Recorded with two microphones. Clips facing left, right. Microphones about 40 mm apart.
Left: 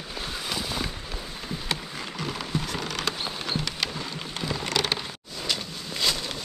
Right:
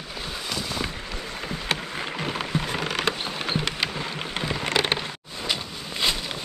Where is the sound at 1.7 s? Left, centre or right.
Right.